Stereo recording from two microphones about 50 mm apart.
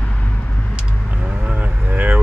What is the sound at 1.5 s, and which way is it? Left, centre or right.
Vehicle, right.